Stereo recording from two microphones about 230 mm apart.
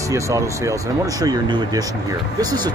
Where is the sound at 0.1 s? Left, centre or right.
Centre.